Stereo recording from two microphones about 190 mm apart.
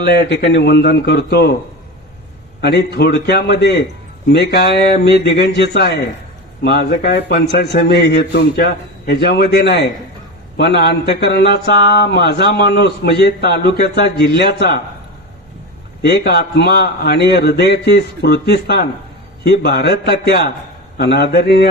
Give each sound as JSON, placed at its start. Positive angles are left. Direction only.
{"t": 0.0, "sound": "a man's voice", "side_deg": 60}
{"t": 2.6, "sound": "a man's voice", "side_deg": 60}
{"t": 16.0, "sound": "a man's voice", "side_deg": 60}